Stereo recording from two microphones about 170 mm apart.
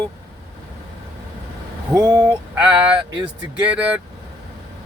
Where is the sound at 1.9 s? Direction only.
20° right (ahead or behind).